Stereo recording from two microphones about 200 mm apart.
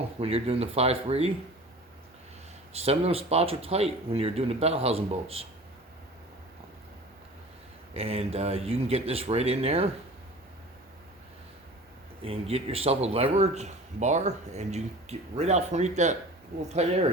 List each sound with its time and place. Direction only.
0.2 s a man's voice: 30° right (ahead or behind)
2.7 s speech: 30° right (ahead or behind)
7.9 s speech: 30° right (ahead or behind)
12.2 s a man's voice: 30° right (ahead or behind)